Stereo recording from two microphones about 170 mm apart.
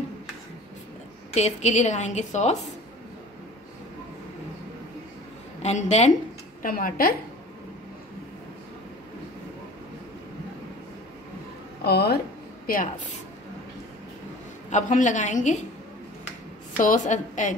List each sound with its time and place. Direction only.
1.3 s a woman's voice: 40° left (ahead or behind)
5.6 s a woman's voice: 40° left (ahead or behind)
6.6 s a woman's voice: 55° left (ahead or behind)
11.8 s speech: 75° left (ahead or behind)
14.7 s a woman's voice: 45° left (ahead or behind)
16.7 s a woman's voice: 50° left (ahead or behind)